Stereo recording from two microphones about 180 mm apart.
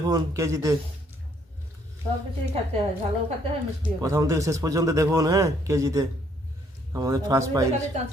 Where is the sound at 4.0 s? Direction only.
20° right (ahead or behind).